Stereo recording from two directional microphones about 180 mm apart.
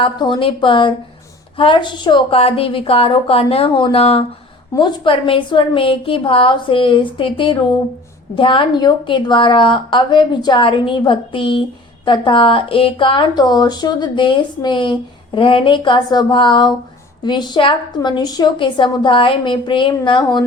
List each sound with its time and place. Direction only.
0.0 s a woman's voice: 25° left (ahead or behind)